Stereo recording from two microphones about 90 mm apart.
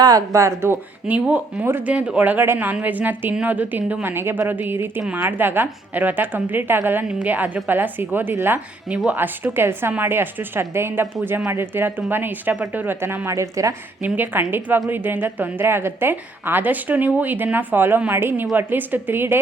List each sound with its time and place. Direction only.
0.0 s a woman's voice: 40° right (ahead or behind)
0.6 s a woman's voice: 20° right (ahead or behind)
14.0 s speech: 20° right (ahead or behind)